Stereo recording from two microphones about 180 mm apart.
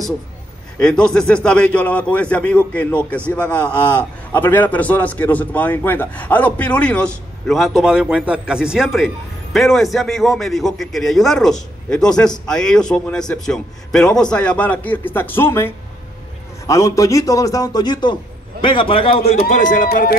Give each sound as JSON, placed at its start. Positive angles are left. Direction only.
{"t": 0.7, "sound": "a man's voice", "side_deg": 5}
{"t": 19.3, "sound": "speech", "side_deg": 50}